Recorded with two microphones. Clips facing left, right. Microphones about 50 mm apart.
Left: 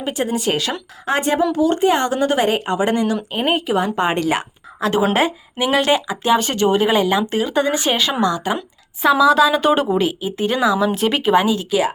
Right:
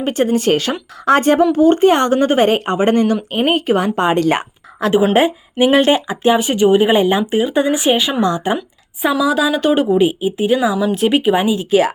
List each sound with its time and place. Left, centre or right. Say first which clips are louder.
0.0 s a woman's voice: right 5 dB; right
3.3 s speech: right 3 dB; right
5.1 s speech: right 5 dB; right
6.4 s speech: right 4 dB; centre
6.9 s speech: right 3 dB; right
8.2 s speech: right 2 dB; right
9.1 s speech: left 2 dB; centre
10.0 s speech: right 5 dB; right